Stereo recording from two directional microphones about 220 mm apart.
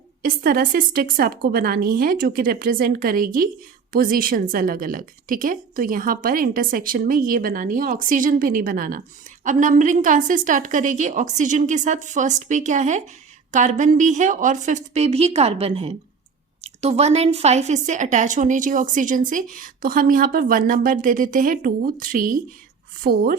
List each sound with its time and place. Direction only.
0.2 s a woman's voice: 40° right (ahead or behind)